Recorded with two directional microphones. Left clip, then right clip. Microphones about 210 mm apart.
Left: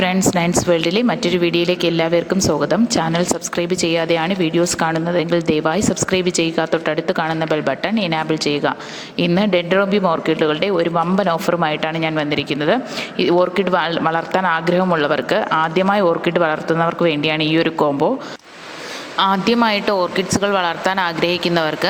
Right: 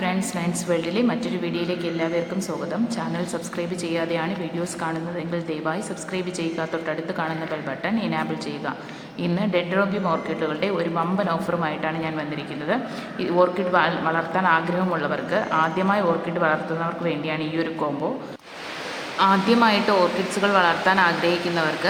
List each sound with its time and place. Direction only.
0.0 s a woman's voice: 40° left (ahead or behind)
19.2 s a woman's voice: 40° left (ahead or behind)